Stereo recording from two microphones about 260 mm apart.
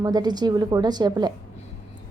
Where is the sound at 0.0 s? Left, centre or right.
Centre.